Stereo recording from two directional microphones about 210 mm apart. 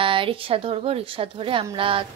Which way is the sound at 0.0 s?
25° right (ahead or behind).